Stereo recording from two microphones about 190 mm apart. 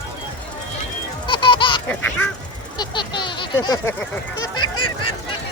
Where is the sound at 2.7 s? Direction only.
25° left (ahead or behind).